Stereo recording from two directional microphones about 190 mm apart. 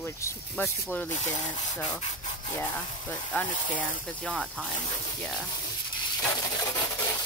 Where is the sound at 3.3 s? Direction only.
10° left (ahead or behind).